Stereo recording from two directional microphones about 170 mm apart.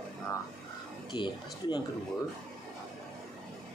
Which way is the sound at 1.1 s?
25° left (ahead or behind).